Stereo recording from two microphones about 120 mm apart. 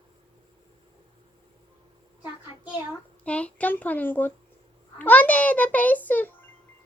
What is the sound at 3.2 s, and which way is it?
A child's voice, 10° left (ahead or behind).